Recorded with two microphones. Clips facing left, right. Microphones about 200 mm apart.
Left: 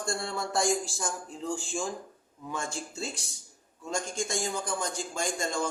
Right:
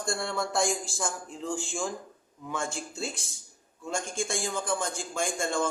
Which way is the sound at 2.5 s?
40° left (ahead or behind).